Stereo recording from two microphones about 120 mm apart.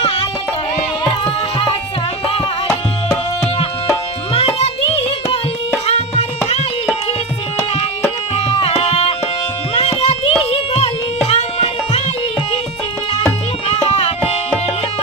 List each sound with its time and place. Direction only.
4.4 s music: 55° left (ahead or behind)
8.4 s music: 55° left (ahead or behind)
8.8 s tabla: 50° left (ahead or behind)
9.7 s a sound: 60° left (ahead or behind)
11.3 s music: 65° left (ahead or behind)